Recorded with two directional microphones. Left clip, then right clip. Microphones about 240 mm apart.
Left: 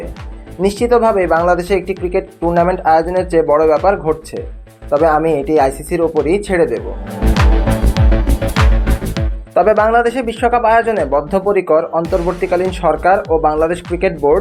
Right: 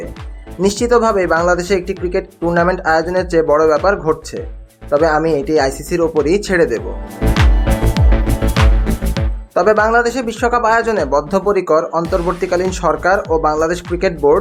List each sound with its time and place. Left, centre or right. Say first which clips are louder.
0.8 s speech: left 1 dB; centre
7.2 s music: left 1 dB; centre
9.6 s speech: left 1 dB; centre